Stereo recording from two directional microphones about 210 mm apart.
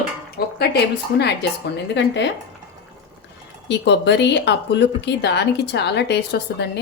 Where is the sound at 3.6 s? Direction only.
55° left (ahead or behind).